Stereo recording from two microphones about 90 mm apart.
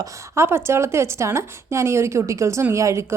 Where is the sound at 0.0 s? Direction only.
30° right (ahead or behind).